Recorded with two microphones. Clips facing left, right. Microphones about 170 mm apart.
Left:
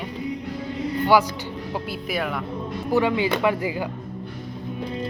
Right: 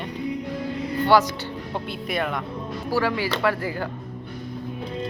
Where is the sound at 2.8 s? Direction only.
20° left (ahead or behind).